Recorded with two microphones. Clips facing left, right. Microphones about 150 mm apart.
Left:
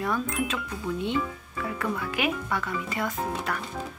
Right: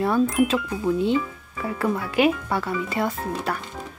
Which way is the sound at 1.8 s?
30° right (ahead or behind).